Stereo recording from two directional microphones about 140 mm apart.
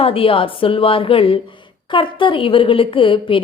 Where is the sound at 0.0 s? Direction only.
40° left (ahead or behind).